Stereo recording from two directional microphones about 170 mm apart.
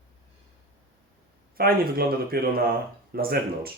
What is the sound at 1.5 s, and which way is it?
Speech, 65° right (ahead or behind).